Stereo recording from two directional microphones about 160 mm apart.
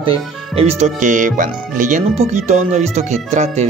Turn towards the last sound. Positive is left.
turn(degrees=-45)  # may be behind; listen again after turning